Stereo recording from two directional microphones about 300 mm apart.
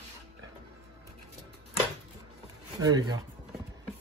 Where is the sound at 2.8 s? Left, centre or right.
Centre.